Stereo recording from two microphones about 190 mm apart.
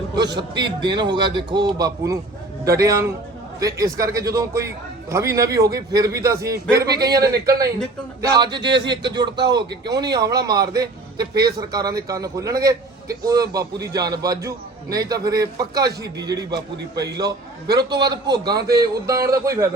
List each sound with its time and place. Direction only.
0.2 s a man's voice: 20° right (ahead or behind)
8.3 s a man's voice: 20° right (ahead or behind)
16.7 s a man's voice: 65° right (ahead or behind)
17.2 s a man's voice: 20° right (ahead or behind)